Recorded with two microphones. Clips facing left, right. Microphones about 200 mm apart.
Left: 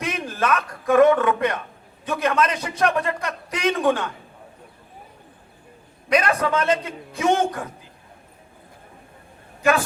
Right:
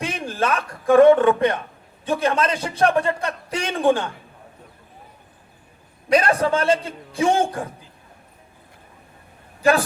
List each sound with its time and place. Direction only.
0.0 s a man's voice: 30° right (ahead or behind)
6.1 s a man's voice: 30° right (ahead or behind)